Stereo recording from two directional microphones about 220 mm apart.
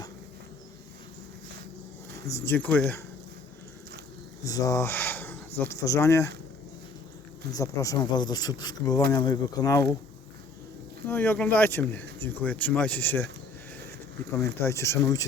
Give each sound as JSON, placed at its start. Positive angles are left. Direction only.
{"t": 2.2, "sound": "speech", "side_deg": 10}
{"t": 4.4, "sound": "speech", "side_deg": 15}
{"t": 7.5, "sound": "speech", "side_deg": 15}
{"t": 11.1, "sound": "speech", "side_deg": 10}
{"t": 14.3, "sound": "speech", "side_deg": 15}